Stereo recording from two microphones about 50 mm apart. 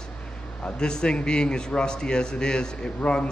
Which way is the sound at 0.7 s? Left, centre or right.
Centre.